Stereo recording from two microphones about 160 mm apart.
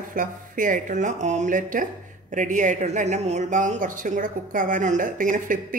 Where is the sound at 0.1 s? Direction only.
60° right (ahead or behind).